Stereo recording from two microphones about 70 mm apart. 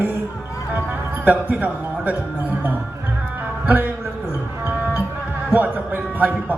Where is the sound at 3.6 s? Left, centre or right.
Right.